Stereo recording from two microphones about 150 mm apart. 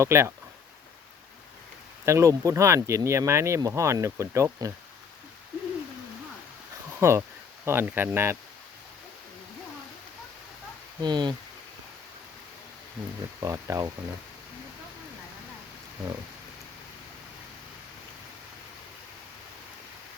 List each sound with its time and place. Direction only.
0.0 s speech: 20° right (ahead or behind)
2.0 s speech: 20° right (ahead or behind)
7.0 s speech: 15° right (ahead or behind)
11.0 s speech: 30° right (ahead or behind)
13.4 s speech: 20° right (ahead or behind)